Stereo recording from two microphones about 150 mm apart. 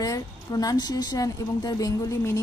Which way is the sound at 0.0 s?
25° left (ahead or behind).